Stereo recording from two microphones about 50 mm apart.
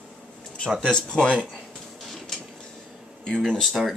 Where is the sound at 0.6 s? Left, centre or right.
Centre.